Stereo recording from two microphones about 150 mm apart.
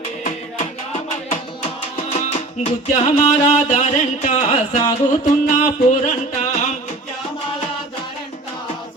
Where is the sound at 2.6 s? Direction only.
45° left (ahead or behind).